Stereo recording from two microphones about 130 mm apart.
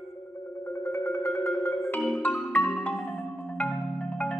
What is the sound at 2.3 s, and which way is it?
Marimba, 5° left (ahead or behind).